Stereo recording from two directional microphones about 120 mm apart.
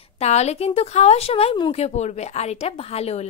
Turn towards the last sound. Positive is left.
turn(degrees=60)  # may be behind; listen again after turning